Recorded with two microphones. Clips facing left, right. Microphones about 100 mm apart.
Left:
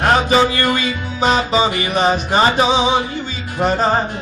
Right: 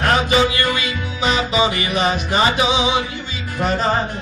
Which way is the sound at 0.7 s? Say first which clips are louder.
Left 3 dB; 40° left (ahead or behind).